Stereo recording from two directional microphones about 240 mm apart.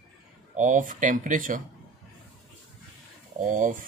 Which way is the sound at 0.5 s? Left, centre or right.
Right.